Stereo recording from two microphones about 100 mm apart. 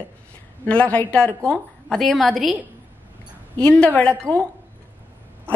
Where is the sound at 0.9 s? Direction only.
10° left (ahead or behind).